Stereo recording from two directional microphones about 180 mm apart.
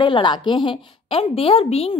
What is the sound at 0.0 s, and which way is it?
A woman's voice, 25° left (ahead or behind).